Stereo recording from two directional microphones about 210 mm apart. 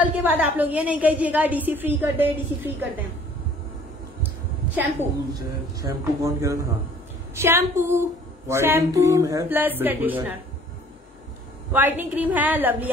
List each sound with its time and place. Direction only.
0.0 s a woman's voice: 5° right (ahead or behind)
5.3 s a woman's voice: 15° right (ahead or behind)
11.7 s a woman's voice: 10° right (ahead or behind)